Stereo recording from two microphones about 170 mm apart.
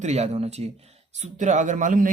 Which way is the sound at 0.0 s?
40° right (ahead or behind).